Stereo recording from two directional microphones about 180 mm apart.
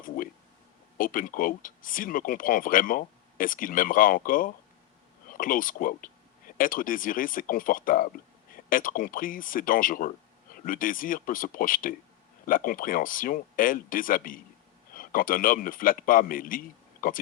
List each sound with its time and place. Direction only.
0.9 s speech: 50° left (ahead or behind)